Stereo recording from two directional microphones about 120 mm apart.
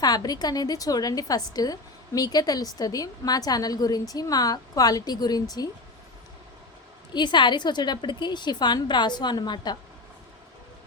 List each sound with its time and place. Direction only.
0.0 s a woman's voice: 35° left (ahead or behind)
7.1 s a woman's voice: 40° left (ahead or behind)